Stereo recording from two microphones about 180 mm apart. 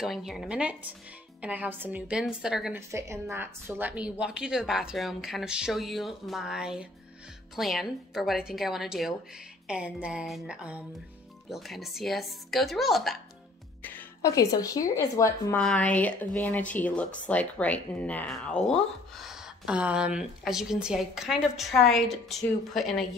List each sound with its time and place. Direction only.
0.0 s a woman's voice: centre (ahead or behind)
2.9 s a woman's voice: 15° right (ahead or behind)
13.8 s speech: 15° left (ahead or behind)
15.6 s a woman's voice: 5° left (ahead or behind)